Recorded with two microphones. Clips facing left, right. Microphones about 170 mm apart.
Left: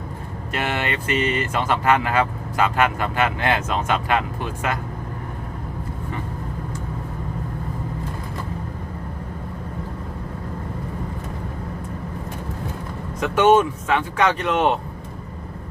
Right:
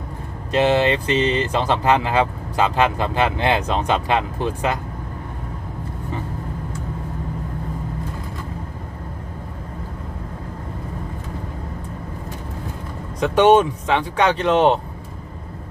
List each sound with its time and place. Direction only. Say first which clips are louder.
0.5 s speech: right 9 dB; 25° right (ahead or behind)
13.2 s speech: right 2 dB; 30° right (ahead or behind)